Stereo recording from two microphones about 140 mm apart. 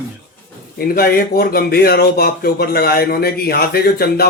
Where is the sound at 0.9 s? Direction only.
90° left.